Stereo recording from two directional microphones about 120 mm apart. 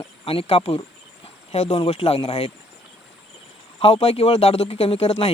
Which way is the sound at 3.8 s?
50° left (ahead or behind).